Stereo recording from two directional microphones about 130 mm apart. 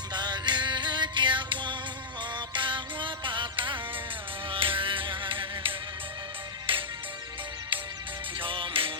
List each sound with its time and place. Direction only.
0.1 s music: 35° right (ahead or behind)
8.4 s music: 40° right (ahead or behind)